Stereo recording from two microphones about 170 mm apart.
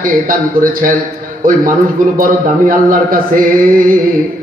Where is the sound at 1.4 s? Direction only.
55° right (ahead or behind).